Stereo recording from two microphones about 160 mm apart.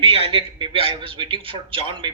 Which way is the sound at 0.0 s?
35° right (ahead or behind).